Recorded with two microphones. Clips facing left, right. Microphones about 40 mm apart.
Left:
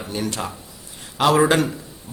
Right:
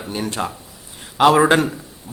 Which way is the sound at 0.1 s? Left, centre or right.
Centre.